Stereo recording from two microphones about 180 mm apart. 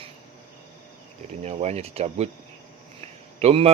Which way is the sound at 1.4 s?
35° right (ahead or behind).